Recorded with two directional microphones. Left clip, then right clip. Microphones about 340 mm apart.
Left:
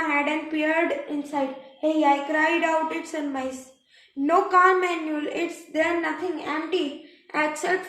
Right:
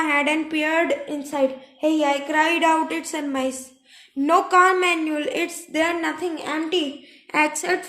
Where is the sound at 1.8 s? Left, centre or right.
Right.